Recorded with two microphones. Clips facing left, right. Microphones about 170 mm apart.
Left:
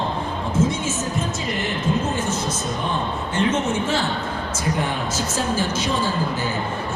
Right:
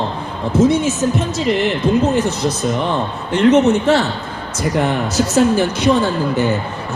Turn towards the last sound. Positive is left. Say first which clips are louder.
# right 7 dB
turn(degrees=-65)  # may be behind; listen again after turning